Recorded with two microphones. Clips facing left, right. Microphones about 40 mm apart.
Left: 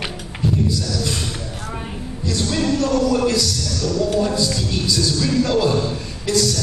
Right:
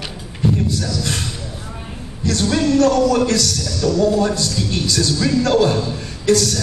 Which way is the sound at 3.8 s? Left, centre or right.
Right.